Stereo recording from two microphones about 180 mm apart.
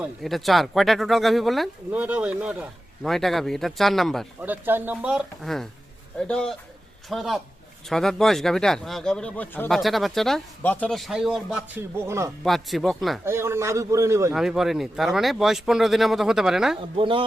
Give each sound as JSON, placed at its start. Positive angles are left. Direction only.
{"t": 0.0, "sound": "speech", "side_deg": 0}
{"t": 4.4, "sound": "speech", "side_deg": -10}
{"t": 12.5, "sound": "speech", "side_deg": 0}
{"t": 13.2, "sound": "speech", "side_deg": -15}
{"t": 14.3, "sound": "speech", "side_deg": 0}
{"t": 17.0, "sound": "a man's voice", "side_deg": -30}